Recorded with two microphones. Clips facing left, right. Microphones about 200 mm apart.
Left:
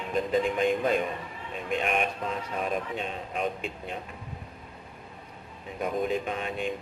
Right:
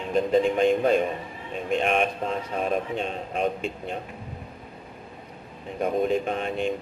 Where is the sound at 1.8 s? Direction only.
35° right (ahead or behind).